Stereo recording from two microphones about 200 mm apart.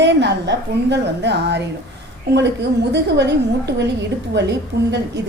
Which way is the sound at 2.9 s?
60° right (ahead or behind).